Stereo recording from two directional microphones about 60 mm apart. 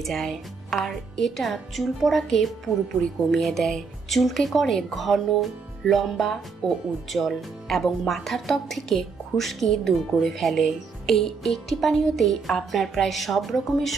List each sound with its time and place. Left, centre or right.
0.0 s speech: centre